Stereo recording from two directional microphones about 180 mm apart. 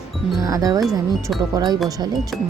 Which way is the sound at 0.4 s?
20° right (ahead or behind).